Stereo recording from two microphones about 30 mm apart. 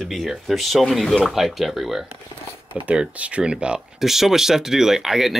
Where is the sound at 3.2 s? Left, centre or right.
Right.